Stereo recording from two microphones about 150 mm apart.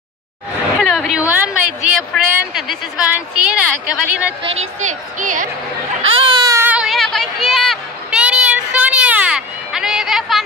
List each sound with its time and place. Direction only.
0.7 s a sound: centre (ahead or behind)
2.5 s a woman's voice: 5° right (ahead or behind)
4.4 s a woman's voice: 40° right (ahead or behind)
4.7 s speech: 55° right (ahead or behind)
6.1 s baby cry: 30° right (ahead or behind)
6.7 s a sound: 5° right (ahead or behind)